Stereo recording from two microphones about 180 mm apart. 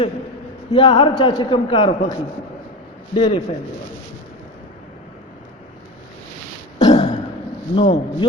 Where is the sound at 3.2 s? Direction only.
25° left (ahead or behind).